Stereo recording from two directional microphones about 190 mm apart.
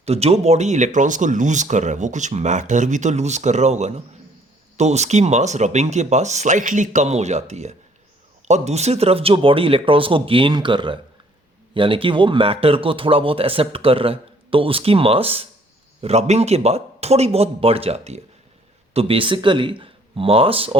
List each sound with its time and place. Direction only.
0.0 s speech: 35° right (ahead or behind)